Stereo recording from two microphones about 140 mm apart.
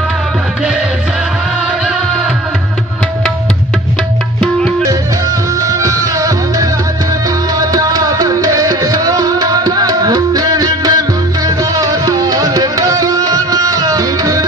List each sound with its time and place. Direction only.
5.7 s music: 20° right (ahead or behind)